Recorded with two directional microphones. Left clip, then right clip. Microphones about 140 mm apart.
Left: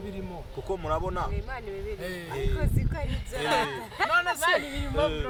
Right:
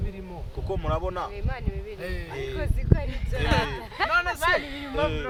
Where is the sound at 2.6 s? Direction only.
20° right (ahead or behind).